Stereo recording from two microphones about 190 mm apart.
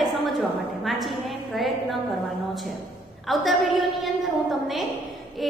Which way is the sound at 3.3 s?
Centre (ahead or behind).